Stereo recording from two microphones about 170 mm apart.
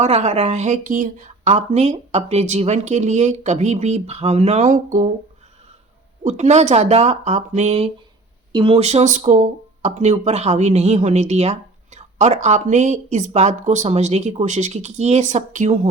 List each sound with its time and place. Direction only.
0.0 s speech: 40° right (ahead or behind)
6.2 s speech: 45° right (ahead or behind)